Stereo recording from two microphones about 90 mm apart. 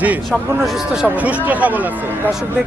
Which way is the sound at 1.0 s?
15° right (ahead or behind).